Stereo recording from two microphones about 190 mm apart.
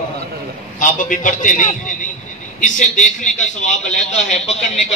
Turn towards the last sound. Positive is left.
turn(degrees=35)  # may be behind; listen again after turning